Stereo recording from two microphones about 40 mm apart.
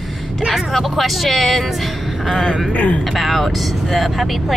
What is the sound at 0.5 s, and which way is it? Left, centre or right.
Speech, centre.